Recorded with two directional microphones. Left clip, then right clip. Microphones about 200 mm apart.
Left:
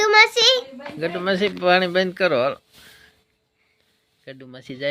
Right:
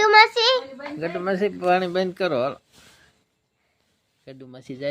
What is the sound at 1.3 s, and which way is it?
Speech, 20° left (ahead or behind).